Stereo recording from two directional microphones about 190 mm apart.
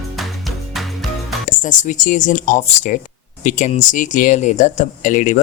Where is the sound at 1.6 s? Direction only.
40° left (ahead or behind).